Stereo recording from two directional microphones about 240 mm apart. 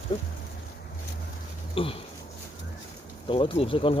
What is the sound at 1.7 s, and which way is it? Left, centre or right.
Speech, left.